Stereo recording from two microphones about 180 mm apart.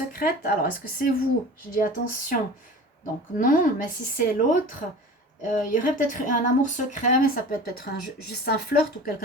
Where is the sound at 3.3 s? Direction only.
50° left (ahead or behind).